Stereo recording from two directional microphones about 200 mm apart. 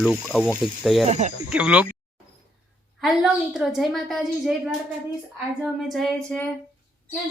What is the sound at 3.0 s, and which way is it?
Speech, centre (ahead or behind).